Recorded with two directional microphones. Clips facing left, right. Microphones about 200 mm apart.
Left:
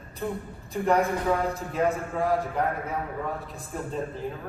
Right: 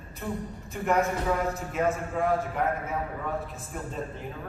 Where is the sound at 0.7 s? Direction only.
35° left (ahead or behind).